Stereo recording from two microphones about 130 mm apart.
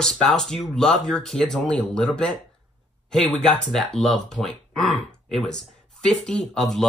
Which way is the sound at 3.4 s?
5° left (ahead or behind).